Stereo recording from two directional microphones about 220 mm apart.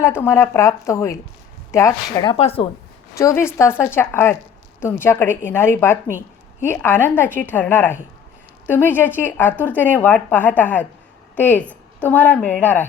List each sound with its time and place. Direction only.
0.0 s a woman's voice: 10° left (ahead or behind)
2.3 s speech: 25° left (ahead or behind)
3.2 s a woman's voice: 15° left (ahead or behind)